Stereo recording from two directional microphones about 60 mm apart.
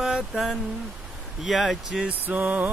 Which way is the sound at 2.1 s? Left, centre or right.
Right.